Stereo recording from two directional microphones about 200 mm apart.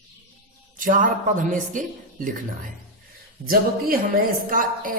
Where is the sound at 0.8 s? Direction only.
45° right (ahead or behind).